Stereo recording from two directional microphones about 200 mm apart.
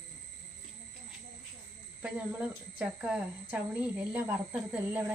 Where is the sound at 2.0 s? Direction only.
5° right (ahead or behind).